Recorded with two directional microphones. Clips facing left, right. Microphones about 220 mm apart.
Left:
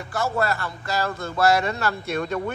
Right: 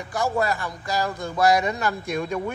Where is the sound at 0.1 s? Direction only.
15° right (ahead or behind).